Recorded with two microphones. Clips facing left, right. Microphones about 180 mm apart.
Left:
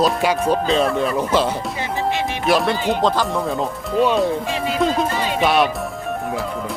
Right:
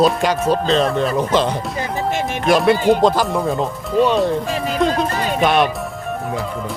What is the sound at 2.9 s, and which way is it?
Speech, 10° right (ahead or behind).